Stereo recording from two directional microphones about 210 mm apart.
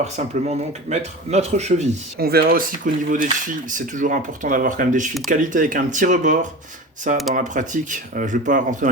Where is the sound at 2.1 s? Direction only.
45° right (ahead or behind).